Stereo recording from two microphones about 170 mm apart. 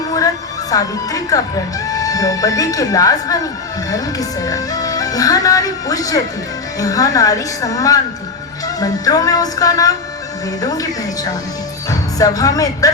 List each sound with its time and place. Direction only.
0.7 s speech: 20° left (ahead or behind)